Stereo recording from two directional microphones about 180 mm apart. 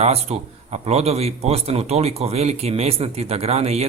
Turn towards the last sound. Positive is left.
turn(degrees=-35)  # may be behind; listen again after turning